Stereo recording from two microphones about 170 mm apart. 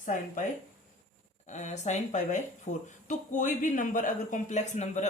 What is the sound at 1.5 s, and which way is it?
Speech, 45° left (ahead or behind).